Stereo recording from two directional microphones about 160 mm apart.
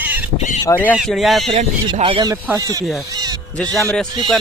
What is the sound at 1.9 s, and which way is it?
Speech, 30° right (ahead or behind).